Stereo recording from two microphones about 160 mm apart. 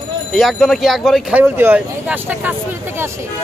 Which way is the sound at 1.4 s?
15° right (ahead or behind).